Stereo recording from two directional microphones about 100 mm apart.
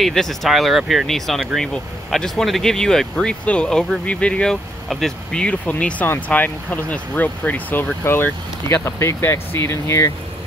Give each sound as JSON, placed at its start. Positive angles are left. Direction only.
{"t": 0.0, "sound": "speech", "side_deg": 5}